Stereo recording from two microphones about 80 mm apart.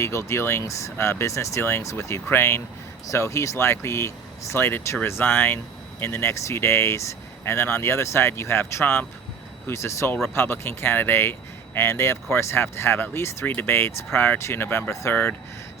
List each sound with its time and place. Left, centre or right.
0.0 s speech: left
15.1 s speech: left